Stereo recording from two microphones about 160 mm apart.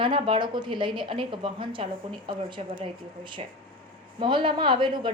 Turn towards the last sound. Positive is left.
turn(degrees=-30)  # may be behind; listen again after turning